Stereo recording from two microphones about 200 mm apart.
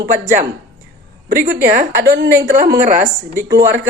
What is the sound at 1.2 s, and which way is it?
A woman's voice, 45° right (ahead or behind).